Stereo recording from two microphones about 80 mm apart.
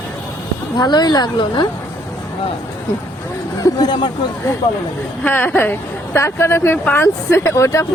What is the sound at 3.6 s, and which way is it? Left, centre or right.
Speech, left.